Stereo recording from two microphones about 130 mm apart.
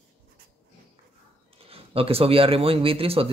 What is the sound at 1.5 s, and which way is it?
Speech, 45° right (ahead or behind).